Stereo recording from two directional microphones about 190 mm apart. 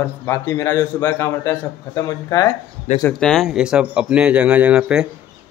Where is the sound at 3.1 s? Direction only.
5° left (ahead or behind).